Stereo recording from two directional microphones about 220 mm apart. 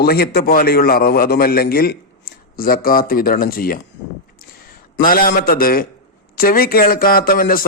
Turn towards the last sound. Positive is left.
turn(degrees=40)  # may be behind; listen again after turning